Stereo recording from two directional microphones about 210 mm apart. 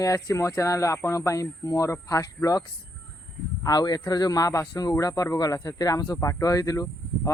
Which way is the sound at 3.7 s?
20° left (ahead or behind).